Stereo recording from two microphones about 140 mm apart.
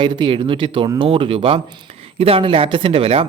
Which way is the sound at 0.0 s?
35° right (ahead or behind).